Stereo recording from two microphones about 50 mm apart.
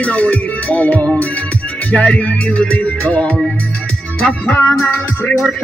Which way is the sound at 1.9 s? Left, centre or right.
Centre.